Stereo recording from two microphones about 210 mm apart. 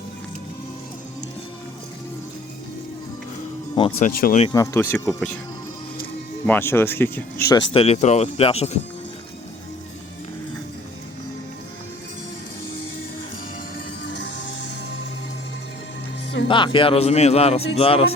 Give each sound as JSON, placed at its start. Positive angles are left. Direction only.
{"t": 4.0, "sound": "speech", "side_deg": 40}
{"t": 4.4, "sound": "speech", "side_deg": 15}
{"t": 6.4, "sound": "speech", "side_deg": 10}
{"t": 14.0, "sound": "music", "side_deg": 55}
{"t": 16.5, "sound": "speech", "side_deg": 25}